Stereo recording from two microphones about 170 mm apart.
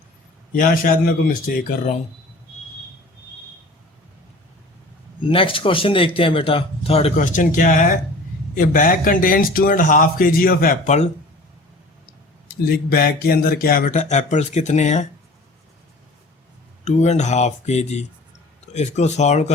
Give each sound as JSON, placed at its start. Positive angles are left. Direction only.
{"t": 0.5, "sound": "speech", "side_deg": 55}
{"t": 5.2, "sound": "speech", "side_deg": 30}
{"t": 7.2, "sound": "speech", "side_deg": 50}
{"t": 12.7, "sound": "speech", "side_deg": 60}
{"t": 16.8, "sound": "speech", "side_deg": 40}